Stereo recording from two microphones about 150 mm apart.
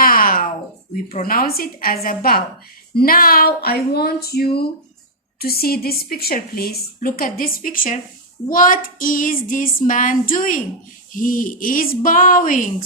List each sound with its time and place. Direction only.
0.0 s a sound: 70° left (ahead or behind)
1.2 s a woman's voice: 75° left (ahead or behind)
8.4 s female singing: 65° left (ahead or behind)